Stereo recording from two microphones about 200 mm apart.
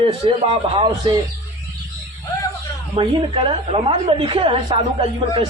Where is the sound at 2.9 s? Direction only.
25° right (ahead or behind).